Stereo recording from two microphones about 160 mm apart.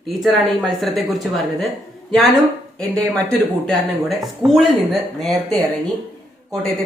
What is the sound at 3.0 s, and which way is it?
Speech, 5° left (ahead or behind).